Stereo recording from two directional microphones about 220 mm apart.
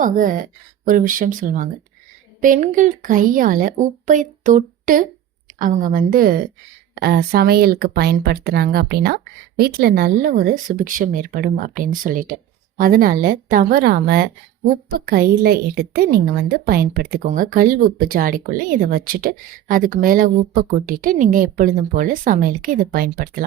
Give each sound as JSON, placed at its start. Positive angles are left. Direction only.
{"t": 0.0, "sound": "speech", "side_deg": -35}